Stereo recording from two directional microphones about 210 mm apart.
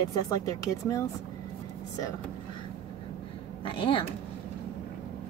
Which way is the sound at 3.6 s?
25° left (ahead or behind).